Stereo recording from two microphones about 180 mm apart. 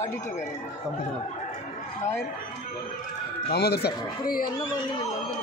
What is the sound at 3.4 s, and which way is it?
Speech, 60° left (ahead or behind).